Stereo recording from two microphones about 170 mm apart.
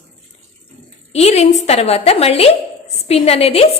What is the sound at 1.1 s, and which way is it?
A woman's voice, 40° left (ahead or behind).